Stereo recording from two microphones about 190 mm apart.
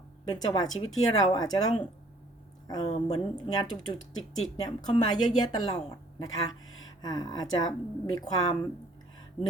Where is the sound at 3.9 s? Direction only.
90° left.